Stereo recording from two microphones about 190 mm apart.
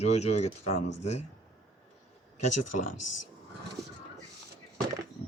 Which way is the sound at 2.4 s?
40° left (ahead or behind).